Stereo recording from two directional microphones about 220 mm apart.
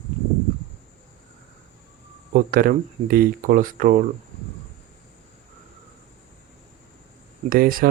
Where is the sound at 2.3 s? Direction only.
40° right (ahead or behind).